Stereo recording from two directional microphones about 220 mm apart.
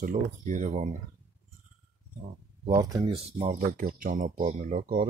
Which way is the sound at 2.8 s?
15° right (ahead or behind).